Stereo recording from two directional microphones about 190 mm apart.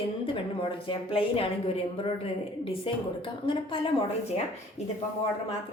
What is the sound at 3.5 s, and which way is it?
Speech, 25° left (ahead or behind).